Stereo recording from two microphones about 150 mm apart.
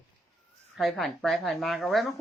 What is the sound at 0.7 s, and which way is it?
Speech, centre (ahead or behind).